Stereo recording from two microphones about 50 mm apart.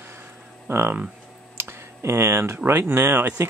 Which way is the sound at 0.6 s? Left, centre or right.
Right.